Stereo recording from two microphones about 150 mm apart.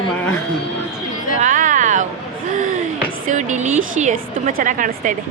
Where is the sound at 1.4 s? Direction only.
60° right (ahead or behind).